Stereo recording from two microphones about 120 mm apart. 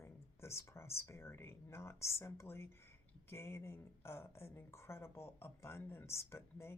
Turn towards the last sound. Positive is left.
turn(degrees=20)  # may be behind; listen again after turning